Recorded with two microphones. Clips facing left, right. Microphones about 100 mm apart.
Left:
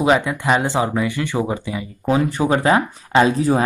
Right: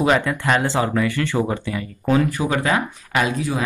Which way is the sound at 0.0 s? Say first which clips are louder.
Left 1 dB; 15° left (ahead or behind).